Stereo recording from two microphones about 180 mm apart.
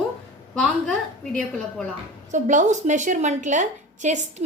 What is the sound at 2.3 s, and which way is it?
A woman's voice, 45° right (ahead or behind).